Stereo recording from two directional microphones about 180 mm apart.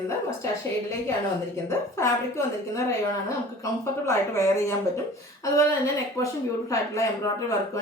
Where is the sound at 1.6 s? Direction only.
15° left (ahead or behind).